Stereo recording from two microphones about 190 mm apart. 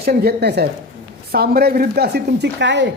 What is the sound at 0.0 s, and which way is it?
A man's voice, 55° right (ahead or behind).